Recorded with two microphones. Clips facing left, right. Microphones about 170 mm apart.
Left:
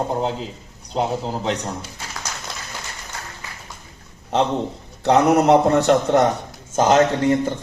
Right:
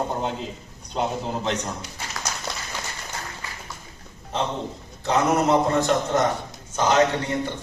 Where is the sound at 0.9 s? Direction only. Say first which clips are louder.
Left 3 dB; 35° left (ahead or behind).